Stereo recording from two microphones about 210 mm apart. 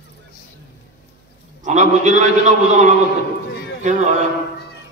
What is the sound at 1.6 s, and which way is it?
Speech, 35° right (ahead or behind).